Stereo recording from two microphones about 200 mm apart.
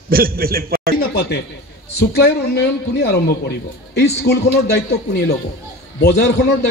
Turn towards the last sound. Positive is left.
turn(degrees=60)  # may be behind; listen again after turning